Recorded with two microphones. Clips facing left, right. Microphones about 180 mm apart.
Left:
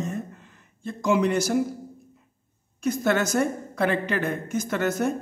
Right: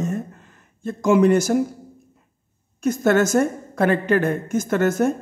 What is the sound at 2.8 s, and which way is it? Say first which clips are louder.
Speech: right 6 dB; 45° right (ahead or behind).